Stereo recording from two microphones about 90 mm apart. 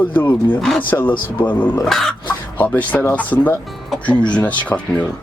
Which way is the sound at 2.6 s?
15° left (ahead or behind).